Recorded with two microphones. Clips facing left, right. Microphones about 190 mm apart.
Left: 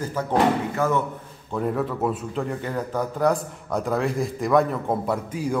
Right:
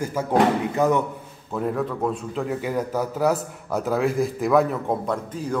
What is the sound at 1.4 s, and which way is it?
A man's voice, centre (ahead or behind).